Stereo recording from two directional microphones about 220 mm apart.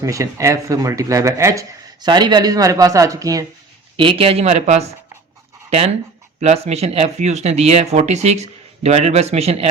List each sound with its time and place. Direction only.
0.0 s speech: 15° right (ahead or behind); by 4.9 s 30° right (ahead or behind)
6.4 s speech: 30° right (ahead or behind)